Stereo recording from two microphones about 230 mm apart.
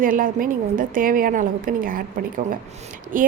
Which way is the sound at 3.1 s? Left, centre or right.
Right.